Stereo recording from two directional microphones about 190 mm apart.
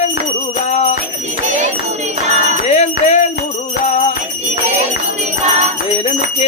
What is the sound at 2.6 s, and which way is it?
Music, 40° left (ahead or behind).